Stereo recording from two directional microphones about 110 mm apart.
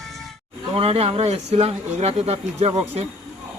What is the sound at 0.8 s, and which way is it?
Speech, 65° right (ahead or behind).